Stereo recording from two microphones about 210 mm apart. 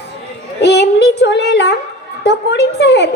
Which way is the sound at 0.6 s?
55° left (ahead or behind).